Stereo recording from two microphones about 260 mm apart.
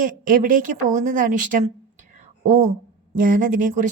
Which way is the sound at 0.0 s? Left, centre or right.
Right.